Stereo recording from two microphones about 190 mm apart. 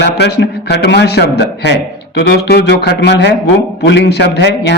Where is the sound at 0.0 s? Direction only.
60° left (ahead or behind).